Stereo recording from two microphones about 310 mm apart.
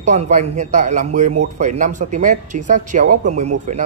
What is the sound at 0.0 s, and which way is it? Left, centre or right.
Speech, right.